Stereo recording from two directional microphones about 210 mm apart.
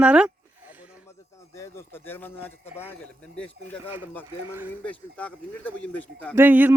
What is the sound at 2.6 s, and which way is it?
Speech, 30° left (ahead or behind).